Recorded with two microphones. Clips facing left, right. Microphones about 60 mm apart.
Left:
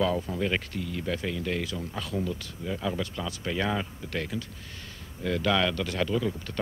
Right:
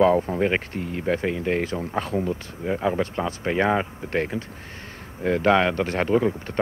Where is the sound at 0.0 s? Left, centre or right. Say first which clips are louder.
Right 8 dB; right.